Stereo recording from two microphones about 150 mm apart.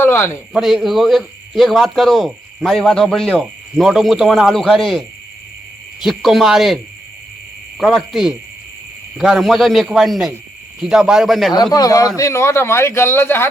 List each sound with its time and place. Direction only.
0.0 s speech: 15° left (ahead or behind)
0.5 s a man's voice: centre (ahead or behind)
7.8 s a man's voice: centre (ahead or behind)
11.5 s a man's voice: 25° left (ahead or behind)